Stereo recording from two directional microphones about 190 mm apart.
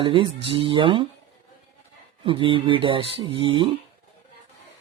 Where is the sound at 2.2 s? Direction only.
25° right (ahead or behind).